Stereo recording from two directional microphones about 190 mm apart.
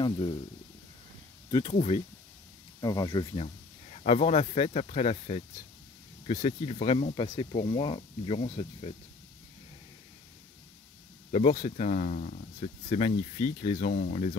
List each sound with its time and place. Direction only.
0.0 s speech: 25° left (ahead or behind)
1.5 s speech: 35° left (ahead or behind)
2.8 s speech: 20° left (ahead or behind)
11.6 s speech: 40° left (ahead or behind)